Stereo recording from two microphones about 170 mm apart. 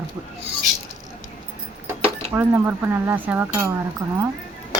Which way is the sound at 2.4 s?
10° right (ahead or behind).